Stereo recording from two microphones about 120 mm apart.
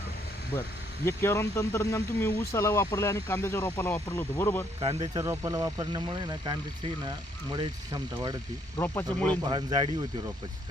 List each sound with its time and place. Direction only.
1.0 s speech: 20° left (ahead or behind)
4.9 s speech: 30° right (ahead or behind)
8.8 s speech: 15° left (ahead or behind)
9.4 s speech: 40° right (ahead or behind)